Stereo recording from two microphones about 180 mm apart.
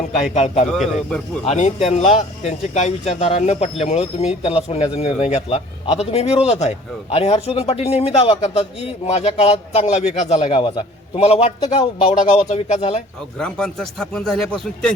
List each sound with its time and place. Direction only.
0.3 s speech: 35° left (ahead or behind)
0.7 s a man's voice: 5° left (ahead or behind)
1.5 s speech: 35° left (ahead or behind)
13.4 s a man's voice: 5° left (ahead or behind)